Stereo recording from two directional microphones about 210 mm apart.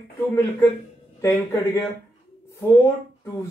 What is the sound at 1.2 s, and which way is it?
Speech, 10° left (ahead or behind).